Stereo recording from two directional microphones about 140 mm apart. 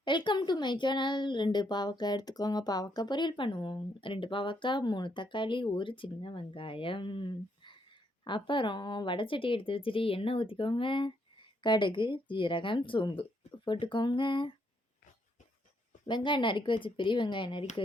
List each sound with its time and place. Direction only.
0.0 s a woman's voice: 35° left (ahead or behind)
16.0 s a woman's voice: 35° left (ahead or behind)